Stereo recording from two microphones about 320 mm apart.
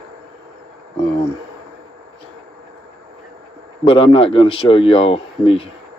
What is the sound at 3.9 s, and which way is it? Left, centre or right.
Speech, centre.